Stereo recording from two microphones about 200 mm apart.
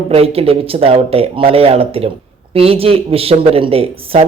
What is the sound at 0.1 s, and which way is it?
Speech, 30° right (ahead or behind).